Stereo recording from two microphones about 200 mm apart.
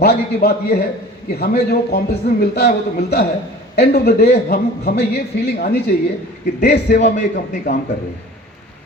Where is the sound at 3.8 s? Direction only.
50° left (ahead or behind).